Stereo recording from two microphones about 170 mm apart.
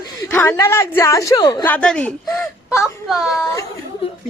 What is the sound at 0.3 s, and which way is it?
A woman's voice, 15° left (ahead or behind).